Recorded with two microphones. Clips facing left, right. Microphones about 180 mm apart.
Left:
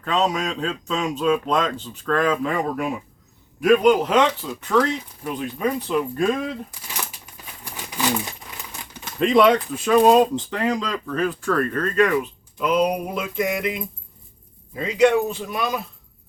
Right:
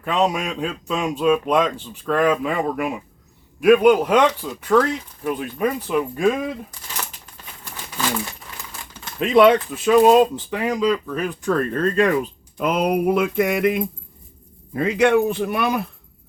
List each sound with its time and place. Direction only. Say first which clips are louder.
0.0 s speech: right 1 dB; 10° right (ahead or behind)
7.6 s a sound: left 1 dB; 15° left (ahead or behind)
9.2 s speech: right 2 dB; 5° right (ahead or behind)
11.7 s speech: right 2 dB; 30° right (ahead or behind)
12.5 s mantra: right 1 dB; 55° right (ahead or behind)